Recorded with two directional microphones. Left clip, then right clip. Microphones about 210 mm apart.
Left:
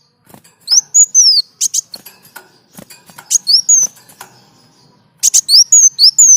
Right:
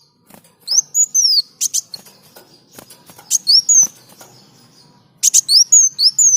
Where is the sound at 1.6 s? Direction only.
15° left (ahead or behind).